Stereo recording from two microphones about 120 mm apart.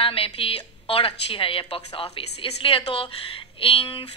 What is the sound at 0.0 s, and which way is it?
A woman's voice, 50° left (ahead or behind).